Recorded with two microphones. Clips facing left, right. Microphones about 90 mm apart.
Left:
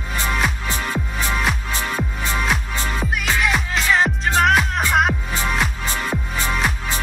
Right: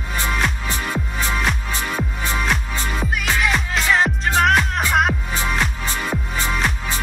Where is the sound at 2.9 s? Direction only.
Centre (ahead or behind).